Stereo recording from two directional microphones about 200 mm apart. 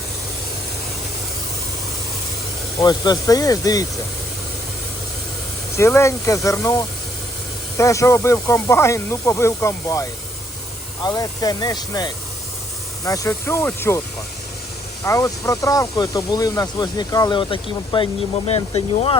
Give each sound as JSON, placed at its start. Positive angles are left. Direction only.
{"t": 2.8, "sound": "speech", "side_deg": 20}
{"t": 5.7, "sound": "speech", "side_deg": 15}
{"t": 15.0, "sound": "speech", "side_deg": 15}